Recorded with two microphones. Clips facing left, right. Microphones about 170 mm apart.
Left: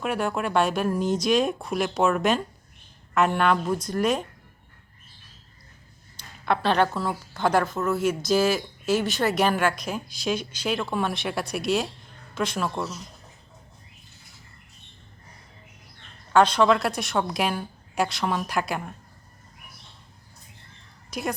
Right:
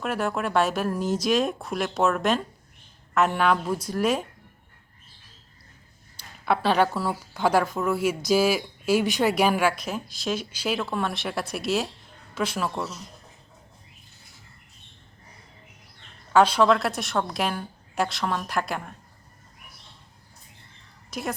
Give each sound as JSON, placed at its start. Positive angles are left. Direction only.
{"t": 0.0, "sound": "a woman's voice", "side_deg": 0}
{"t": 6.4, "sound": "a woman's voice", "side_deg": -5}
{"t": 16.3, "sound": "a woman's voice", "side_deg": -5}
{"t": 21.1, "sound": "speech", "side_deg": 0}